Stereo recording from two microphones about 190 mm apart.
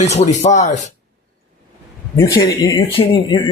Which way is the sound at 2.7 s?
30° left (ahead or behind).